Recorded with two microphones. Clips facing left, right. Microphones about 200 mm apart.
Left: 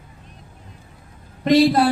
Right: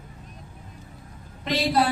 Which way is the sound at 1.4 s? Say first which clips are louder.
Left 9 dB; 50° left (ahead or behind).